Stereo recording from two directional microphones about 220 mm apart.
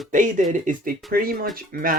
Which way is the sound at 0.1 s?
35° right (ahead or behind).